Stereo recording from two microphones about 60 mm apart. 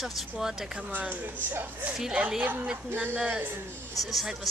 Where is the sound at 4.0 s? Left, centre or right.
Centre.